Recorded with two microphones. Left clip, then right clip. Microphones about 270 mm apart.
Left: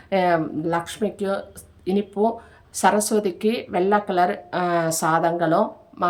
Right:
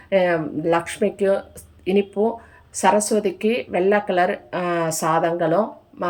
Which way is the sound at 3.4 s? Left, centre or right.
Left.